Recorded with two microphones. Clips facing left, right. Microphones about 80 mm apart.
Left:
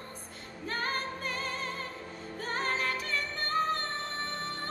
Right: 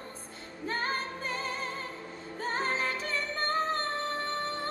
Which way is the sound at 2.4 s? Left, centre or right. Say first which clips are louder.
Right 1 dB; right.